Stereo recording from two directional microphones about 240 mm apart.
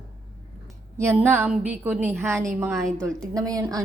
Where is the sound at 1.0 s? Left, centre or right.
Centre.